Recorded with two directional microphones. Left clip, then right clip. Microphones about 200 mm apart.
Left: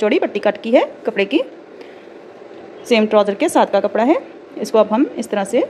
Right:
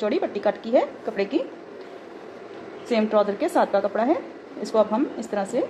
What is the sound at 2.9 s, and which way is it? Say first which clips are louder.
A woman's voice: left 7 dB; 50° left (ahead or behind).